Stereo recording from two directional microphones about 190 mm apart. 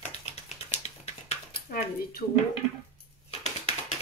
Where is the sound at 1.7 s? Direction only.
45° left (ahead or behind).